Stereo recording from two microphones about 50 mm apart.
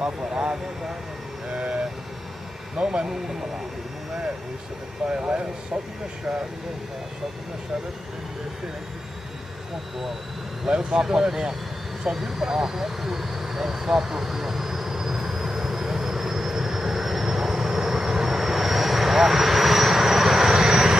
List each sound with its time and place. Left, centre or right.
0.0 s speech: centre
1.5 s vehicle: centre
2.8 s speech: centre
5.1 s speech: centre
10.7 s speech: centre
12.0 s vehicle: centre